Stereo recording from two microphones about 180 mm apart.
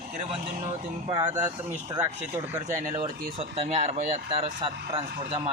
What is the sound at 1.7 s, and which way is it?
Speech, 20° right (ahead or behind).